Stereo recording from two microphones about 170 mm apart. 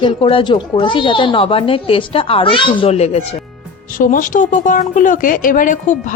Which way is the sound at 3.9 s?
50° left (ahead or behind).